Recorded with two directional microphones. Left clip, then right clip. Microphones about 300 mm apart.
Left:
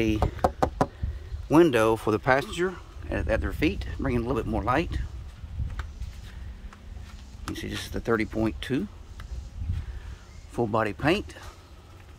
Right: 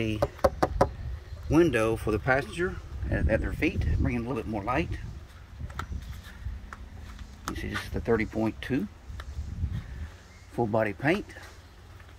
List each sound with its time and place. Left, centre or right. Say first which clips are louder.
0.0 s speech: left 1 dB; centre
7.5 s a sound: even; centre
7.9 s speech: left 1 dB; centre
10.5 s speech: left 1 dB; centre